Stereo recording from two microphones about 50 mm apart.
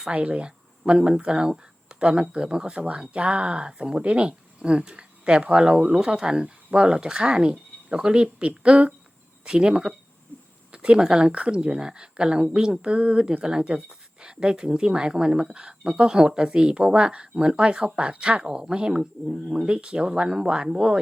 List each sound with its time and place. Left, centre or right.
0.1 s speech: right